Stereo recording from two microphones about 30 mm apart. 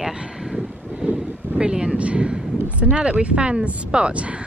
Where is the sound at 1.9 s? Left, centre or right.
Right.